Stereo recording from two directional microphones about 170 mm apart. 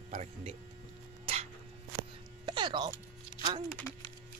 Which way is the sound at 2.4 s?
25° right (ahead or behind).